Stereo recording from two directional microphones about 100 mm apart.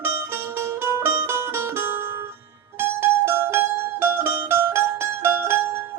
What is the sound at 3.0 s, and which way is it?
Mandolin, 25° right (ahead or behind).